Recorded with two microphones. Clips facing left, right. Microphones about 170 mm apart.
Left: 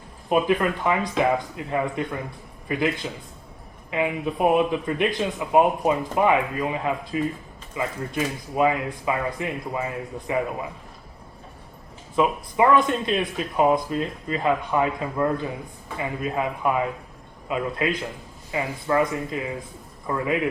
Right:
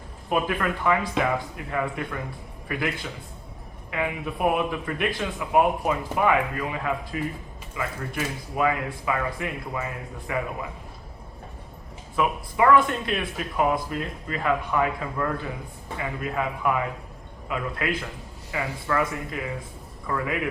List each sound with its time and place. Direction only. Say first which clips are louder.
0.3 s speech: left 4 dB; 20° left (ahead or behind)
12.1 s speech: left 4 dB; 25° left (ahead or behind)